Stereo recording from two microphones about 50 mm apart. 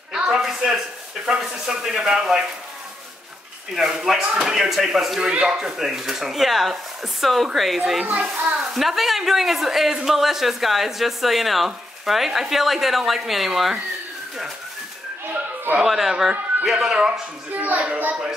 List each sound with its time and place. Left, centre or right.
0.1 s speech: centre
3.8 s speech: centre
8.0 s a child's voice: right
8.7 s speech: centre
15.8 s speech: centre
17.6 s a child's voice: right